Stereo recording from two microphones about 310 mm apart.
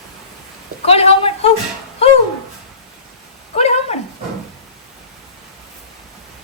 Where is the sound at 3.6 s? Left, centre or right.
Left.